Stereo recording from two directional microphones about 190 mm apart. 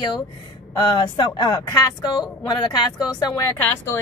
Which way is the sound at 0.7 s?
20° left (ahead or behind).